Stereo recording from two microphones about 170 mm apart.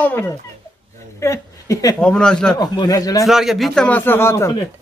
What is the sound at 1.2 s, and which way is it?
Speech, 15° left (ahead or behind).